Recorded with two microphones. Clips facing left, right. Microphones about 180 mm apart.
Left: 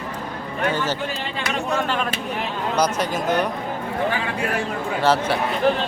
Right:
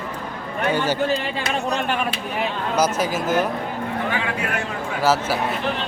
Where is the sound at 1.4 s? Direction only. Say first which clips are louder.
Left 3 dB; 20° right (ahead or behind).